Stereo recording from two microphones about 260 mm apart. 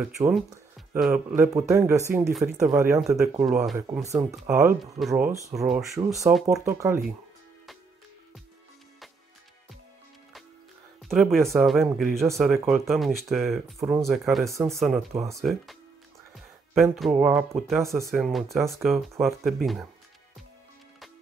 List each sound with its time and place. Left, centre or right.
0.7 s speech: centre
11.0 s speech: centre